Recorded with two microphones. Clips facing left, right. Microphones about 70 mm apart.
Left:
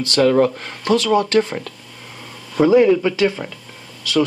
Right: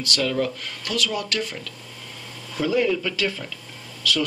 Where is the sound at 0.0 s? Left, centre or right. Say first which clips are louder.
Left 10 dB; left.